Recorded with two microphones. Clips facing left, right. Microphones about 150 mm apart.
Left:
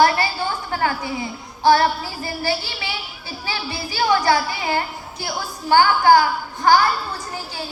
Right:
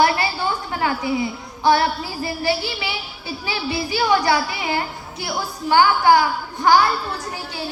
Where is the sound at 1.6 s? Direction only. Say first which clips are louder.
Left 2 dB; 35° left (ahead or behind).